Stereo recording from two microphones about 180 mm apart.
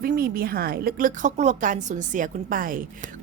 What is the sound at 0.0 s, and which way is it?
A woman's voice, 55° right (ahead or behind).